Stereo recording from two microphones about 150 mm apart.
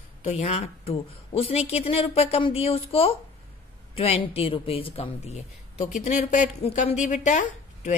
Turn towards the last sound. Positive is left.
turn(degrees=50)  # may be behind; listen again after turning